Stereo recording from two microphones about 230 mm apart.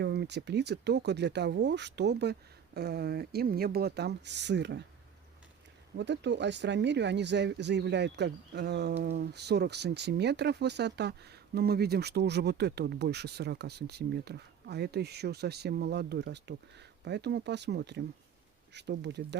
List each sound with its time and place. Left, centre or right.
0.0 s speech: right
6.0 s speech: right